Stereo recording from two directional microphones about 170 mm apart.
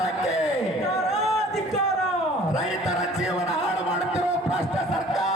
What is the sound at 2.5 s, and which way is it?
Music, centre (ahead or behind).